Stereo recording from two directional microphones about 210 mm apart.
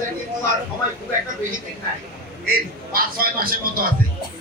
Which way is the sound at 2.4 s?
45° right (ahead or behind).